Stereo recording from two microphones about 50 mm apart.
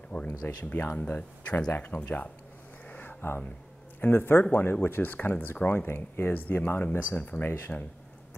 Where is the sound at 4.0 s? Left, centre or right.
Left.